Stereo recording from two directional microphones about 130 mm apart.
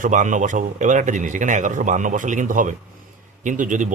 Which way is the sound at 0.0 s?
75° right (ahead or behind).